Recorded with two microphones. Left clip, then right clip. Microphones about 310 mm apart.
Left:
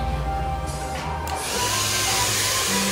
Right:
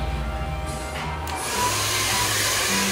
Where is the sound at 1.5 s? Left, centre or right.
Right.